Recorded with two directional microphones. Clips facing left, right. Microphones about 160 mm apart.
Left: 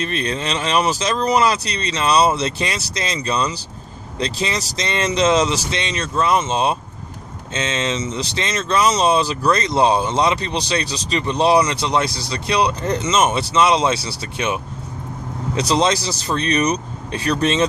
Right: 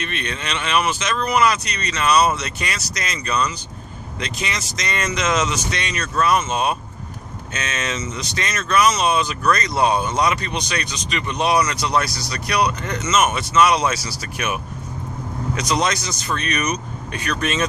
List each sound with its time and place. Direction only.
0.0 s speech: 35° left (ahead or behind)